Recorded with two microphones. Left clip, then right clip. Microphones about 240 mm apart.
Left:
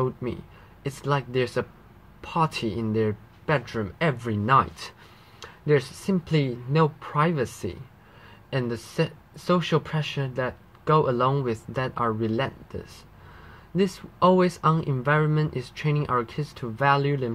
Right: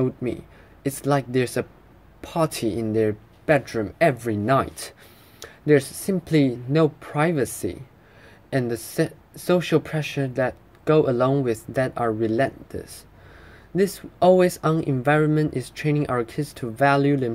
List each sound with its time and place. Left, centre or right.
0.8 s speech: right